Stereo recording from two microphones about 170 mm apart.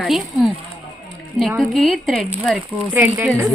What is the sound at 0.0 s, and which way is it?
A woman's voice, centre (ahead or behind).